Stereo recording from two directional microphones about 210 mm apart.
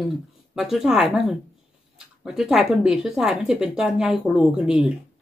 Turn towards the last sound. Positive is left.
turn(degrees=-5)  # may be behind; listen again after turning